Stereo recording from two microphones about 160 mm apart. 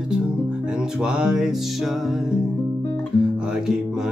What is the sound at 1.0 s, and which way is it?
Music, 5° right (ahead or behind).